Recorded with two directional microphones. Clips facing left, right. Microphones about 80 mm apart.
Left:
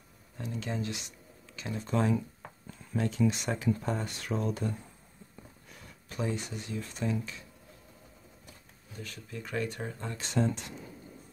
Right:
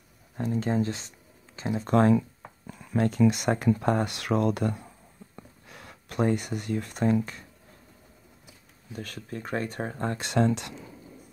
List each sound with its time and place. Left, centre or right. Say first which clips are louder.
0.4 s speech: right 9 dB; right
1.9 s speech: right 8 dB; right
2.1 s a sound: right 7 dB; right
3.0 s speech: right 6 dB; right
8.9 s speech: right 6 dB; right